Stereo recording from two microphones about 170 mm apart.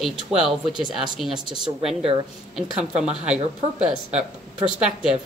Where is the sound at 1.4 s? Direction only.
25° right (ahead or behind).